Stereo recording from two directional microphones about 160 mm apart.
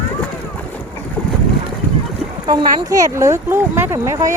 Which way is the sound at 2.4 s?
25° right (ahead or behind).